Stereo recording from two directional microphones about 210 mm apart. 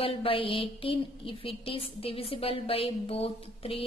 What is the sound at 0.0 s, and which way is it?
A woman's voice, 25° left (ahead or behind).